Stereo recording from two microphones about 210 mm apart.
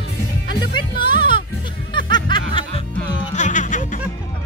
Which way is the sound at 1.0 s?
20° left (ahead or behind).